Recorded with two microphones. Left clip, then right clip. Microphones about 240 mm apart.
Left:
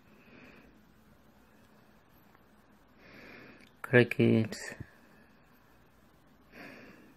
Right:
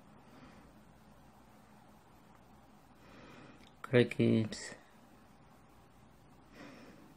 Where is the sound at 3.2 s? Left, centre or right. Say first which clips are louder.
Left 5 dB; centre.